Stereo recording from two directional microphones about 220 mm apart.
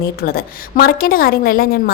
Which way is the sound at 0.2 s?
40° left (ahead or behind).